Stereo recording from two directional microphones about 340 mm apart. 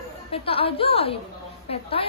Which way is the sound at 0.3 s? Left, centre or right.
Centre.